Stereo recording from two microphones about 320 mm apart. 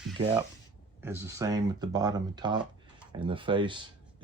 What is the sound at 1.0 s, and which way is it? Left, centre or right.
Speech, centre.